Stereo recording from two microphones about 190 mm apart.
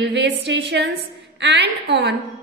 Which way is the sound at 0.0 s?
65° right (ahead or behind).